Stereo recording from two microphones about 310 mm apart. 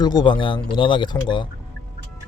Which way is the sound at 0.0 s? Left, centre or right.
Centre.